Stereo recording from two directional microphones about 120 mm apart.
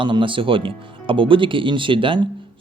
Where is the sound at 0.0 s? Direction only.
45° right (ahead or behind).